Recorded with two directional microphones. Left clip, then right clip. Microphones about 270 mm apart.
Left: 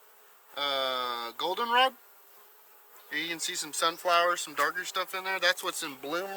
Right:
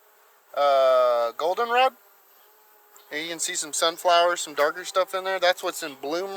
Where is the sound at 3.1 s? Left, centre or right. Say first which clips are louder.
Right 3 dB; right.